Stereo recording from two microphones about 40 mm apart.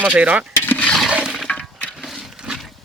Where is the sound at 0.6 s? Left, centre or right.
Left.